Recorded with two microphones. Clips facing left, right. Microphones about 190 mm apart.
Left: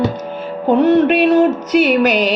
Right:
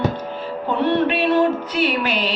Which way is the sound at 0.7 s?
45° left (ahead or behind).